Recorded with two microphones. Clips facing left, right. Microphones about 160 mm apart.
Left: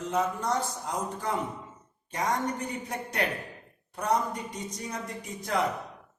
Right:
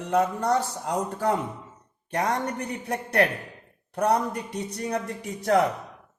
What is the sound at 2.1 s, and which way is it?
Speech, 65° right (ahead or behind).